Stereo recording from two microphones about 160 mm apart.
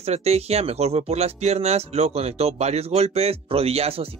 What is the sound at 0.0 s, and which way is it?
Speech, 40° right (ahead or behind).